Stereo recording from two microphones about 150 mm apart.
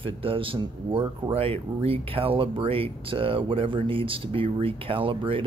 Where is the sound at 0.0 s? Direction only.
35° right (ahead or behind).